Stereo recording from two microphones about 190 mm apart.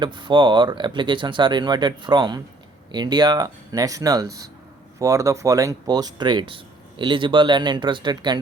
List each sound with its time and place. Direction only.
0.0 s speech: 25° right (ahead or behind)